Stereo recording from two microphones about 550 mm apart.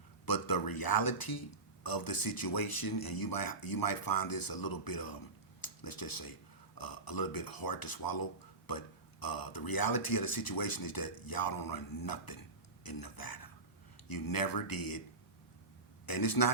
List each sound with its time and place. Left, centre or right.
0.3 s speech: left
16.0 s speech: left